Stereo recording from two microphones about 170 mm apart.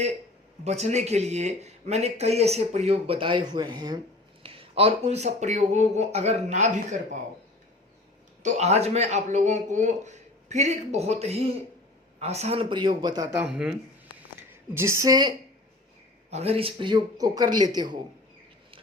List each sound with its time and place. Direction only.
0.6 s speech: 40° right (ahead or behind)
8.4 s speech: 45° right (ahead or behind); by 13.2 s 25° right (ahead or behind)
13.3 s a woman's voice: 5° right (ahead or behind)
16.3 s speech: 35° right (ahead or behind)